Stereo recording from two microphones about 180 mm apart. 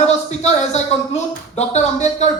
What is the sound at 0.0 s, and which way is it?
Speech, 40° left (ahead or behind).